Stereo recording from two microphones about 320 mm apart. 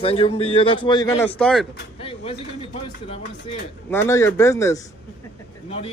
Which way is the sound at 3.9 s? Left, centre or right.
Centre.